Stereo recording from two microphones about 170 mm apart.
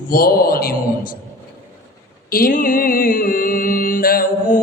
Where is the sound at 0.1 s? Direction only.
60° left (ahead or behind).